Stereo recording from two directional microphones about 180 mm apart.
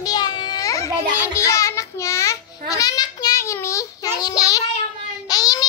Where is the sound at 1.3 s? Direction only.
15° left (ahead or behind).